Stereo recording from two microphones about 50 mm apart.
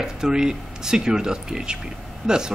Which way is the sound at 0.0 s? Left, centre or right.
Centre.